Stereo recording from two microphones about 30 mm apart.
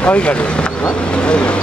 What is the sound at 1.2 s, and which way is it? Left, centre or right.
Speech, left.